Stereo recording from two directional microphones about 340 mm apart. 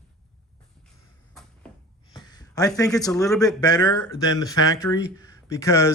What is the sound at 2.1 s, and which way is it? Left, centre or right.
Speech, centre.